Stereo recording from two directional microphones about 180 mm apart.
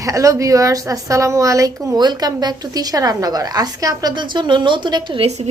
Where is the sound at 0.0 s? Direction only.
20° right (ahead or behind).